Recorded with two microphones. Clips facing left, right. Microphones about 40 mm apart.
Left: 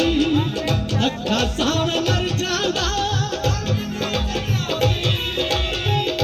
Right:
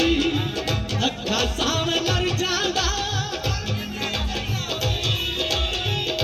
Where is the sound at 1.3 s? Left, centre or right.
Centre.